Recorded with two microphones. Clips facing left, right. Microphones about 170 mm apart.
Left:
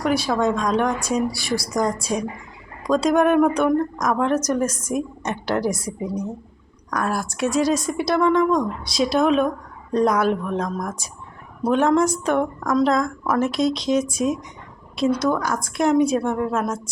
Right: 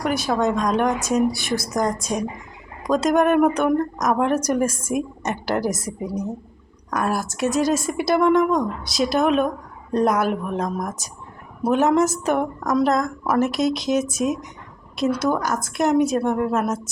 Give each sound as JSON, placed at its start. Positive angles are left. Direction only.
{"t": 0.0, "sound": "a woman's voice", "side_deg": 0}
{"t": 2.0, "sound": "a woman's voice", "side_deg": 0}